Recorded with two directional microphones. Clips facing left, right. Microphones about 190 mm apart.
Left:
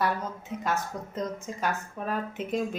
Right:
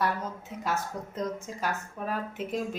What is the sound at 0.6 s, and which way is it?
A woman's voice, 5° right (ahead or behind).